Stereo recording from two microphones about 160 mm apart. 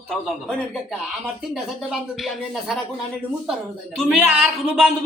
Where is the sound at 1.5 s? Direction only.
Centre (ahead or behind).